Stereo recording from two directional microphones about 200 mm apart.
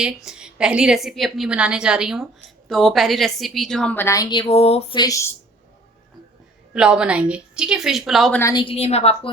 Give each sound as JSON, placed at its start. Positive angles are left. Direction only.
{"t": 0.0, "sound": "a woman's voice", "side_deg": -5}
{"t": 6.7, "sound": "a woman's voice", "side_deg": -5}
{"t": 8.4, "sound": "a woman's voice", "side_deg": 20}